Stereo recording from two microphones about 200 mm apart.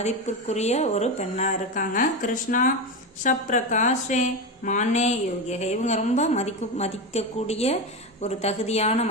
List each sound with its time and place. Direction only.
0.0 s a woman's voice: 35° left (ahead or behind)